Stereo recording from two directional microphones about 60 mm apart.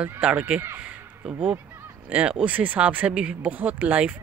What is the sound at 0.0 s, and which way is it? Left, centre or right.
Speech, right.